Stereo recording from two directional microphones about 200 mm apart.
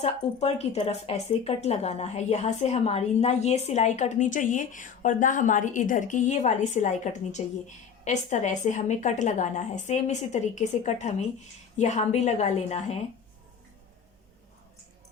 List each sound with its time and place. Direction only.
0.0 s a woman's voice: 30° left (ahead or behind)